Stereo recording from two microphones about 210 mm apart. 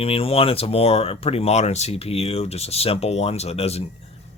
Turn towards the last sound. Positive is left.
turn(degrees=30)  # may be behind; listen again after turning